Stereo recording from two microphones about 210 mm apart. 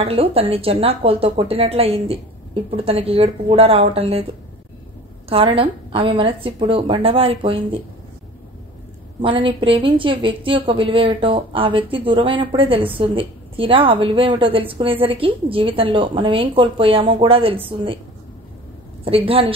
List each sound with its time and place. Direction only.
0.0 s a woman's voice: 30° right (ahead or behind)
5.3 s a woman's voice: 25° right (ahead or behind)
9.2 s a woman's voice: 25° right (ahead or behind)
19.0 s a woman's voice: 25° right (ahead or behind)